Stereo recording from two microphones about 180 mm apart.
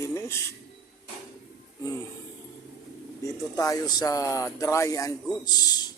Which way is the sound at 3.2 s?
20° left (ahead or behind).